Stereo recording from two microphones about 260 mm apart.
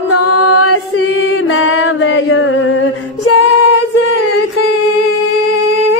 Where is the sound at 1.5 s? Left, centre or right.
Left.